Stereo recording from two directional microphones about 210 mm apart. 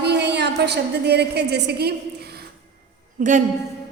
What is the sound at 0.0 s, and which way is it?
A woman's voice, 55° right (ahead or behind).